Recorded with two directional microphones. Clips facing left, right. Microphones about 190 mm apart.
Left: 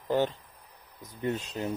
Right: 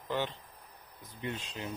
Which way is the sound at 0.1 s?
40° left (ahead or behind).